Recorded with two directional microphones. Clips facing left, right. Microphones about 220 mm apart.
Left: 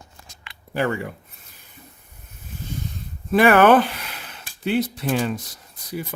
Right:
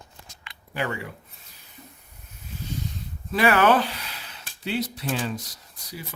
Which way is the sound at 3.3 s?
55° left (ahead or behind).